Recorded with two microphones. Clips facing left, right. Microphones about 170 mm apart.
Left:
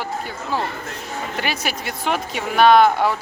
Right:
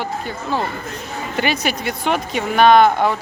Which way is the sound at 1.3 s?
Centre (ahead or behind).